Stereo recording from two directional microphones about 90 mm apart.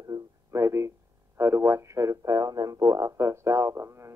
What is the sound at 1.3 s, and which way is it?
Speech, 30° right (ahead or behind).